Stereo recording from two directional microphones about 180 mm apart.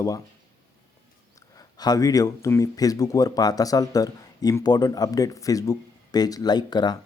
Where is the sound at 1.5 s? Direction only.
20° left (ahead or behind).